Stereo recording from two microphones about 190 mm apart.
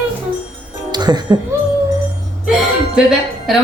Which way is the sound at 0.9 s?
20° right (ahead or behind).